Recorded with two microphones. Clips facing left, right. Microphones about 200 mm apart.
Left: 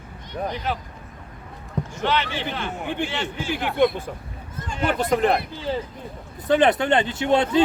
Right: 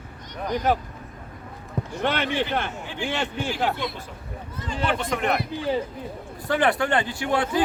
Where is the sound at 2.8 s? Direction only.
60° left (ahead or behind).